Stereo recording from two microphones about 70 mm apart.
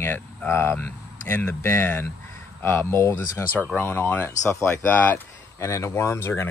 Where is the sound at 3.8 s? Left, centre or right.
Left.